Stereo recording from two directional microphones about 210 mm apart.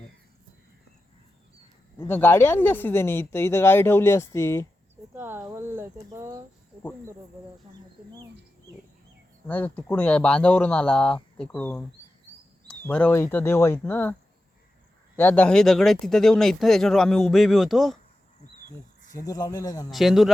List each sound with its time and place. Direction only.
2.0 s speech: 10° left (ahead or behind)
5.1 s speech: 10° right (ahead or behind)
9.5 s speech: 10° left (ahead or behind)
19.1 s speech: 15° left (ahead or behind)
19.9 s speech: centre (ahead or behind)